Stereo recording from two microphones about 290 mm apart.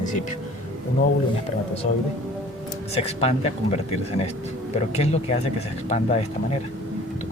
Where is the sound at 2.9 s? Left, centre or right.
Left.